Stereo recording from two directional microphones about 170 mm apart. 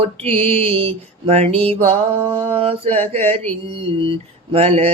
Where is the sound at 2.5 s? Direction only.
35° right (ahead or behind).